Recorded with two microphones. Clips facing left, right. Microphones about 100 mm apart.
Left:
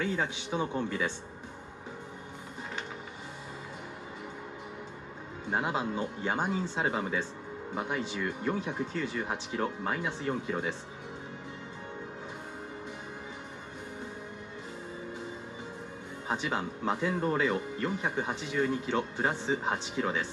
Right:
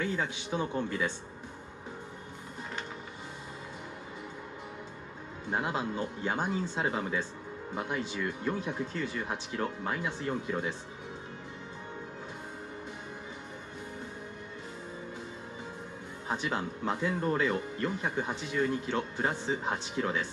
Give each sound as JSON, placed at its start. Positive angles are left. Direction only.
{"t": 0.0, "sound": "speech", "side_deg": 20}
{"t": 5.5, "sound": "speech", "side_deg": 10}
{"t": 16.3, "sound": "speech", "side_deg": 15}